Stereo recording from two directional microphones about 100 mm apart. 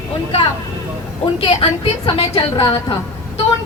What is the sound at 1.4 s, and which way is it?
A woman's voice, 60° left (ahead or behind).